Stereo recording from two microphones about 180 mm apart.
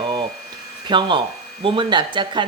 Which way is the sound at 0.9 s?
25° right (ahead or behind).